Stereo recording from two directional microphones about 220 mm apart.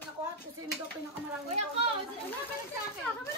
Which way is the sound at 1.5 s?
30° right (ahead or behind).